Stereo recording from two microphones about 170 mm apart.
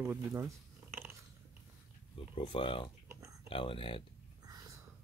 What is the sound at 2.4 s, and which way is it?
Speech, 30° left (ahead or behind).